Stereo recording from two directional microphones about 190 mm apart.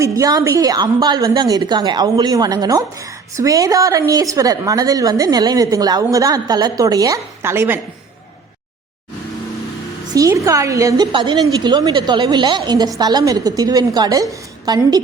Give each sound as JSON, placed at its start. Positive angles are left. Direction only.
{"t": 0.0, "sound": "a woman's voice", "side_deg": -20}
{"t": 10.2, "sound": "a woman's voice", "side_deg": -15}